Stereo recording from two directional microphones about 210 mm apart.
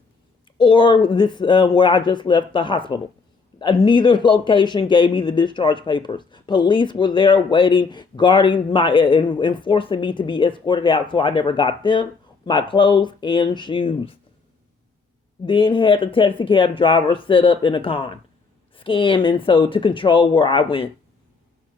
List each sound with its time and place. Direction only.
0.6 s speech: 20° left (ahead or behind)
15.4 s speech: 20° left (ahead or behind)